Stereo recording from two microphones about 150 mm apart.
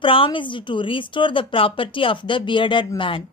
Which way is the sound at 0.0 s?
35° left (ahead or behind).